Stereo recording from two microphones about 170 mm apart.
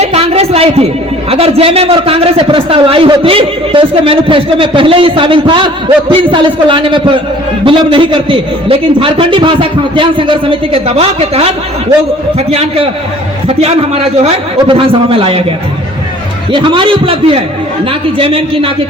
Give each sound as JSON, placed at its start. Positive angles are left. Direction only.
{"t": 0.0, "sound": "a sound", "side_deg": -35}
{"t": 1.3, "sound": "a man's voice", "side_deg": -35}
{"t": 16.5, "sound": "a man's voice", "side_deg": -30}